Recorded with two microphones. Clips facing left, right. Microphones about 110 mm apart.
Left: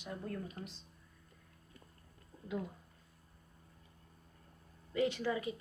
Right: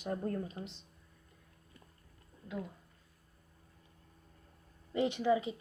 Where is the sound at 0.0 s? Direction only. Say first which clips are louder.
Right 7 dB; 45° right (ahead or behind).